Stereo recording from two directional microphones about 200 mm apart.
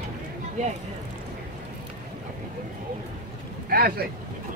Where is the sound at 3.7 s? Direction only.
50° right (ahead or behind).